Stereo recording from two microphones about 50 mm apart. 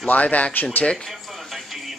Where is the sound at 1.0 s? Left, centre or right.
Centre.